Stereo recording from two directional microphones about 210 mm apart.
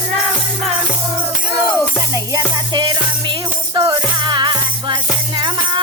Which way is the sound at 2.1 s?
20° right (ahead or behind).